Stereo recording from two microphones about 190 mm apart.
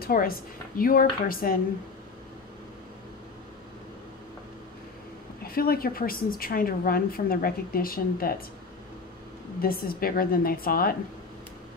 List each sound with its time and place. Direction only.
0.0 s a woman's voice: 50° left (ahead or behind)
5.4 s a woman's voice: 50° left (ahead or behind)
9.6 s a woman's voice: 50° left (ahead or behind)